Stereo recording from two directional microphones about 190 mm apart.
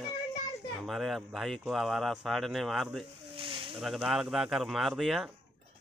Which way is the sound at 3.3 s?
30° right (ahead or behind).